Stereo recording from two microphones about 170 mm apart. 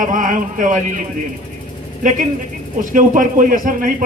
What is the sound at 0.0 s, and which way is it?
Speech, 50° right (ahead or behind).